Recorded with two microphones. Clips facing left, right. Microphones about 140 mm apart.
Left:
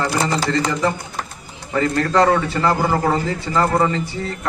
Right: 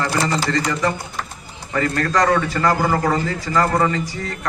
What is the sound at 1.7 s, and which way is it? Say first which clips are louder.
A man's voice: left 2 dB; 25° left (ahead or behind).